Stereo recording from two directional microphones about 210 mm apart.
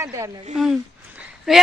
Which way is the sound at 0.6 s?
5° right (ahead or behind).